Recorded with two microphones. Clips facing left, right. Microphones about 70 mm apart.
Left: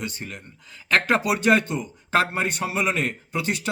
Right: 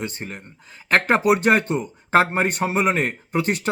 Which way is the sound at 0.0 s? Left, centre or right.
Right.